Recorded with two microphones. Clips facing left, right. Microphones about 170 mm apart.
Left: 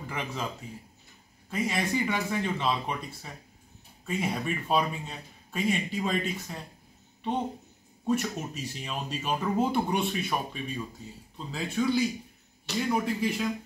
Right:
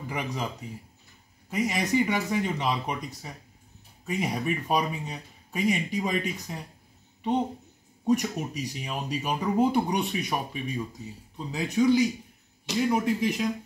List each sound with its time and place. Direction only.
0.0 s speech: 15° right (ahead or behind)
1.5 s speech: 15° right (ahead or behind)
8.1 s speech: 15° right (ahead or behind)